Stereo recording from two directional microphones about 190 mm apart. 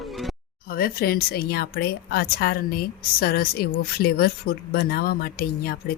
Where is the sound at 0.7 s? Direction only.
50° left (ahead or behind).